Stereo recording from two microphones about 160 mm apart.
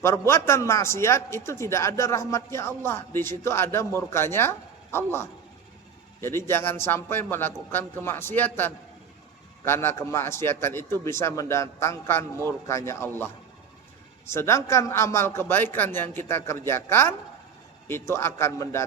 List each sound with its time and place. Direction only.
0.0 s a man's voice: 15° left (ahead or behind)
6.1 s a man's voice: 15° left (ahead or behind)